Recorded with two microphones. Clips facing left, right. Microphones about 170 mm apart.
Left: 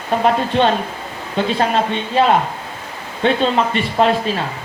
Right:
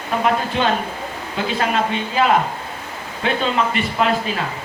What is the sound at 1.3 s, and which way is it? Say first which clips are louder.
Speech: left 4 dB; 30° left (ahead or behind).